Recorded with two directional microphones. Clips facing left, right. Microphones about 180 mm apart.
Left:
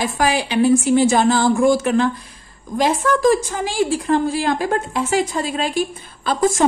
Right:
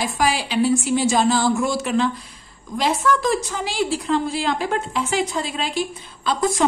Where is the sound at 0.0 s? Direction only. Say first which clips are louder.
Left 3 dB; 60° left (ahead or behind).